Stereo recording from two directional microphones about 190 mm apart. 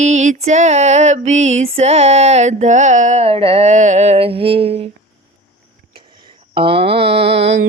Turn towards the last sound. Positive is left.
turn(degrees=-65)  # may be behind; listen again after turning